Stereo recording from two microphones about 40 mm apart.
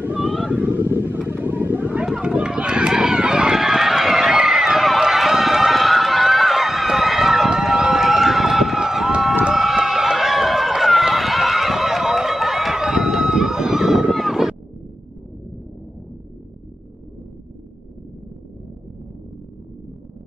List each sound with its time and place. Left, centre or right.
0.6 s a sound: right
0.8 s vehicle: right
1.3 s vehicle: right
2.1 s run: right
3.5 s run: centre
9.5 s horse: centre
9.8 s run: centre
14.1 s a sound: centre